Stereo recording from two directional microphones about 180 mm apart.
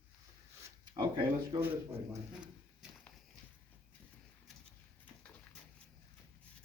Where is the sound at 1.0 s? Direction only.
25° right (ahead or behind).